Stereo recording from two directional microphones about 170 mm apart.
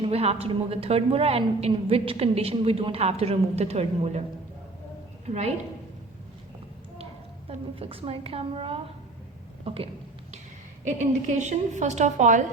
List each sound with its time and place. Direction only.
0.0 s a woman's voice: 35° right (ahead or behind)
5.3 s a woman's voice: 40° right (ahead or behind)
7.0 s a woman's voice: 35° right (ahead or behind)
10.8 s a woman's voice: 45° right (ahead or behind)